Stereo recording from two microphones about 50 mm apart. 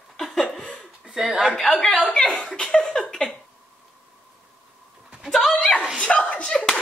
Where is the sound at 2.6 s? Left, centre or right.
Left.